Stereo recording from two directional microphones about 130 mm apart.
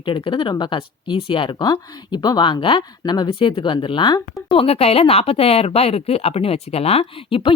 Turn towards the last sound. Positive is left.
turn(degrees=45)  # may be behind; listen again after turning